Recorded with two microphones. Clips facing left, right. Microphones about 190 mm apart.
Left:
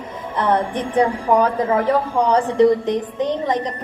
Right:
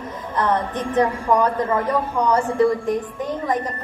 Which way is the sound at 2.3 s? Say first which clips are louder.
Left 4 dB; 20° left (ahead or behind).